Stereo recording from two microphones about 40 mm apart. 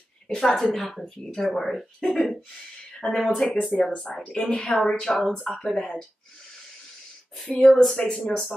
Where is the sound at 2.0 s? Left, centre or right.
Left.